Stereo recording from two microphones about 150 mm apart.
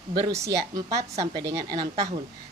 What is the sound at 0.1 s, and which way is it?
A woman's voice, 30° right (ahead or behind).